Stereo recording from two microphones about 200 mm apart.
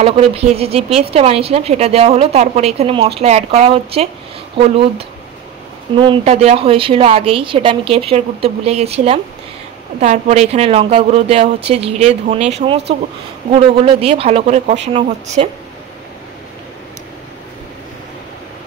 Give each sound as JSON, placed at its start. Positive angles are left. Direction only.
{"t": 0.0, "sound": "a woman's voice", "side_deg": -30}
{"t": 13.7, "sound": "a woman's voice", "side_deg": -30}